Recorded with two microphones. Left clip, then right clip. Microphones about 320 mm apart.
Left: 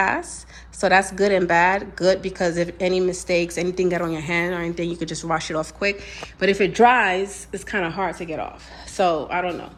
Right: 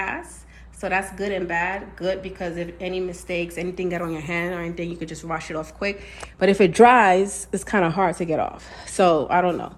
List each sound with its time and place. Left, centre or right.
0.0 s speech: centre
6.7 s a woman's voice: centre